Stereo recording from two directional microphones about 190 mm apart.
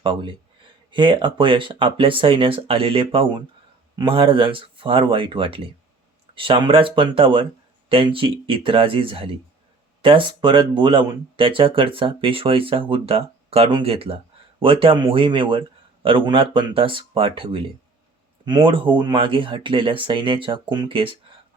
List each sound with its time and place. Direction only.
0.0 s speech: 25° right (ahead or behind)